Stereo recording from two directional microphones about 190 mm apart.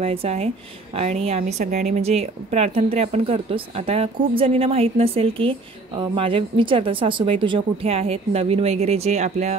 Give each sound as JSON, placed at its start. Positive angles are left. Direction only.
{"t": 0.0, "sound": "a woman's voice", "side_deg": -30}